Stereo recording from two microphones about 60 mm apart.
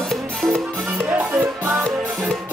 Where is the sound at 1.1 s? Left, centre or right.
Right.